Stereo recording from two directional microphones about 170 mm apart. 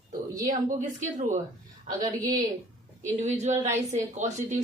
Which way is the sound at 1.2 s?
50° right (ahead or behind).